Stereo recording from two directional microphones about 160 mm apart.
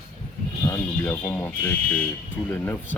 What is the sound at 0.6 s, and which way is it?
Speech, 15° left (ahead or behind).